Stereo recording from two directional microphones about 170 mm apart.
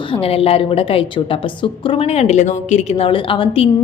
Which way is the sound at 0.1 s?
35° left (ahead or behind).